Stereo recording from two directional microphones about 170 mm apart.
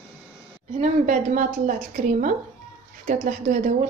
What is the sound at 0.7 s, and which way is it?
A woman's voice, 45° right (ahead or behind).